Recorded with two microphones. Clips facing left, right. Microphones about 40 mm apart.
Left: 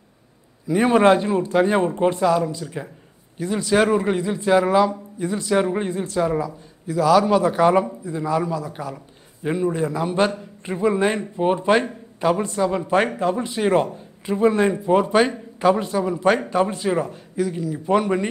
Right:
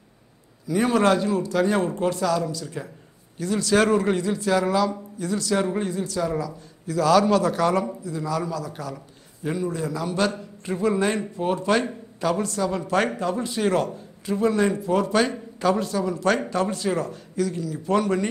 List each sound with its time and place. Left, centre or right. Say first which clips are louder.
0.7 s speech: left 4 dB; left
7.0 s a man's voice: left 2 dB; centre